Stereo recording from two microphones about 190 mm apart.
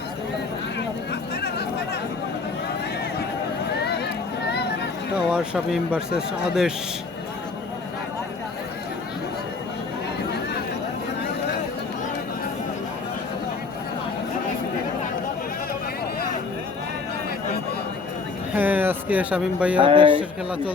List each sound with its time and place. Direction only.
5.1 s speech: 5° right (ahead or behind)
18.5 s a sound: 10° right (ahead or behind)
19.8 s speech: 25° right (ahead or behind)